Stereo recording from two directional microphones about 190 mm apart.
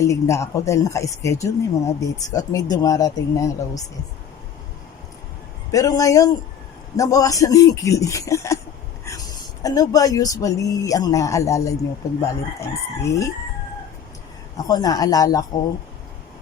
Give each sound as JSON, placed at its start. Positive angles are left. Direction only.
{"t": 0.0, "sound": "speech", "side_deg": 15}
{"t": 5.7, "sound": "speech", "side_deg": 20}
{"t": 9.6, "sound": "speech", "side_deg": 20}
{"t": 14.5, "sound": "speech", "side_deg": 20}